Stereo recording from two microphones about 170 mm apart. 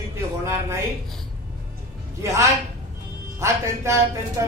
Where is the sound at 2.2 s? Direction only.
15° right (ahead or behind).